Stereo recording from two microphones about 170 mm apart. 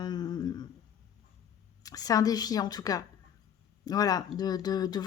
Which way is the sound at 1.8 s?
20° left (ahead or behind).